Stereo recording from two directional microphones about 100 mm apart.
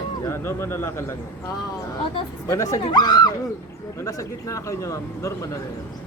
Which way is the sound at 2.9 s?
50° left (ahead or behind).